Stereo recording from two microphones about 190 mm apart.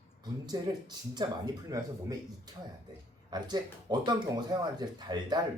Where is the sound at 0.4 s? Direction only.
20° right (ahead or behind).